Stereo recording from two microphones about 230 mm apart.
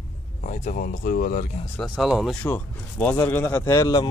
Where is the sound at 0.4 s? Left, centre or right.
Left.